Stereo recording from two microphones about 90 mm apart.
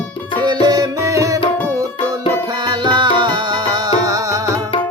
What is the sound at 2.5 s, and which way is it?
Music, 60° right (ahead or behind).